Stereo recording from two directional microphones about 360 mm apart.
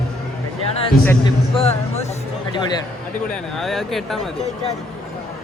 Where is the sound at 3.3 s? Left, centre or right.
Centre.